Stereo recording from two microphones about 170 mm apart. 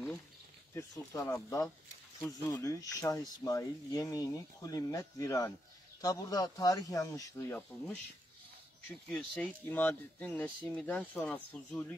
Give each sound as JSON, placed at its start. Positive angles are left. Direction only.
{"t": 0.7, "sound": "speech", "side_deg": 20}
{"t": 9.1, "sound": "speech", "side_deg": 5}